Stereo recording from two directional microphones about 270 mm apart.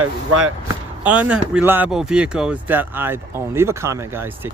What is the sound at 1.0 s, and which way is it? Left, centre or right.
Speech, centre.